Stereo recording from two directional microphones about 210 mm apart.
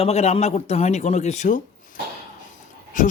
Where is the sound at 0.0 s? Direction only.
30° left (ahead or behind).